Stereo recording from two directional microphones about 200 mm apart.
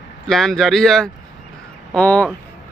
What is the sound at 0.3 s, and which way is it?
Speech, centre (ahead or behind).